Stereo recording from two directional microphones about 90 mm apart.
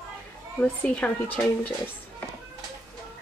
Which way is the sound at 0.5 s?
15° left (ahead or behind).